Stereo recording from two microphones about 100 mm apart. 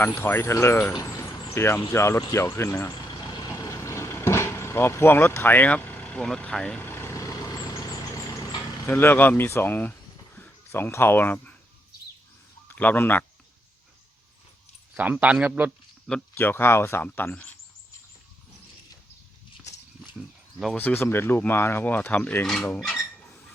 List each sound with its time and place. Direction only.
0.0 s speech: 20° left (ahead or behind)
1.0 s vehicle: 30° left (ahead or behind)
1.5 s speech: 25° left (ahead or behind)
2.9 s vehicle: 45° left (ahead or behind)
3.8 s vehicle: 30° left (ahead or behind)
6.2 s speech: 5° left (ahead or behind)
6.7 s vehicle: 20° left (ahead or behind)
8.9 s speech: 20° left (ahead or behind)
12.6 s a man's voice: 15° left (ahead or behind)
15.1 s speech: 10° right (ahead or behind)
16.3 s speech: 20° left (ahead or behind)
20.7 s speech: 20° left (ahead or behind)
22.8 s a sound: 10° left (ahead or behind)